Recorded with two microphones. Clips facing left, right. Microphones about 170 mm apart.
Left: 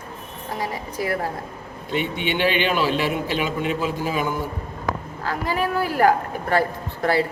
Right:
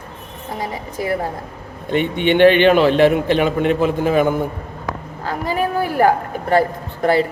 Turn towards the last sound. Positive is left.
turn(degrees=-20)  # may be behind; listen again after turning